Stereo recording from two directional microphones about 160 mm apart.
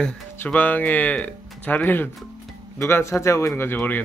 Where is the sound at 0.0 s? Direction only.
10° left (ahead or behind).